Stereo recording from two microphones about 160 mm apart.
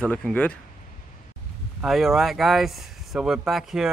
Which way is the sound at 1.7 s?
Centre (ahead or behind).